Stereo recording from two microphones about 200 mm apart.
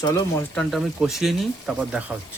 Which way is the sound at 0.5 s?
Centre (ahead or behind).